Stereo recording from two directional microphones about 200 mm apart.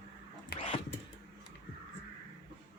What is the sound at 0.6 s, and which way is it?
Dog, 25° left (ahead or behind).